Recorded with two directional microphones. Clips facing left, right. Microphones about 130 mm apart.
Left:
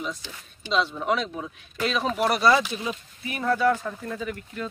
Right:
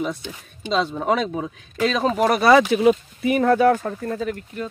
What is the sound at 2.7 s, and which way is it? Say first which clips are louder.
Speech: right 15 dB; 65° right (ahead or behind).